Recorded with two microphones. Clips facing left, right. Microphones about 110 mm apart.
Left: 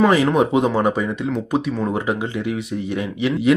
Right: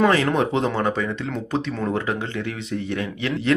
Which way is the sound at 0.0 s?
10° left (ahead or behind).